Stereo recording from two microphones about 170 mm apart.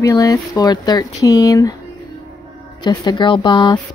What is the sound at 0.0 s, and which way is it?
Speech, 20° left (ahead or behind).